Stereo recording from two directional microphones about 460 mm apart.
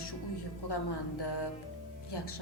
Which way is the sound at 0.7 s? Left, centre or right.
Left.